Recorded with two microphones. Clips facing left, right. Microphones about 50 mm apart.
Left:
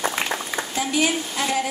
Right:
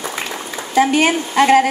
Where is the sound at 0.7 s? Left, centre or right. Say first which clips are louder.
Right 9 dB; right.